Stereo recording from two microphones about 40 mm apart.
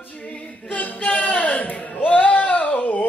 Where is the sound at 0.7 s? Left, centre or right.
Left.